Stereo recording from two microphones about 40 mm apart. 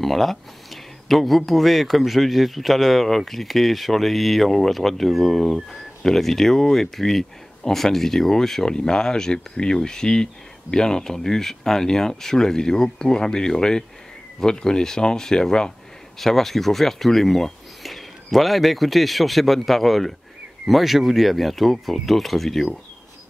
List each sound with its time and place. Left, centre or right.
0.0 s speech: centre
16.2 s speech: centre